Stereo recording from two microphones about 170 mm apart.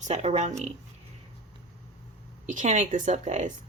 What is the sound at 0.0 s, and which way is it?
Speech, 40° right (ahead or behind).